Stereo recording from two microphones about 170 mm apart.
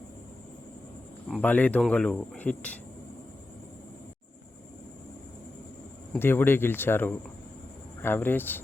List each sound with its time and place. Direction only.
1.4 s speech: 10° left (ahead or behind)
6.1 s speech: 10° left (ahead or behind)